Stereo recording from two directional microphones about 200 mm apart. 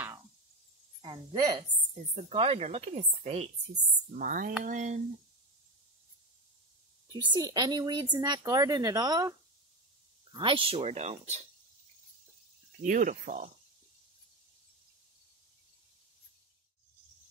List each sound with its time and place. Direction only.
1.0 s a woman's voice: 20° right (ahead or behind)
2.1 s speech: 30° right (ahead or behind)
7.1 s a woman's voice: 20° right (ahead or behind)
10.3 s a woman's voice: 25° right (ahead or behind)
12.8 s speech: 40° right (ahead or behind)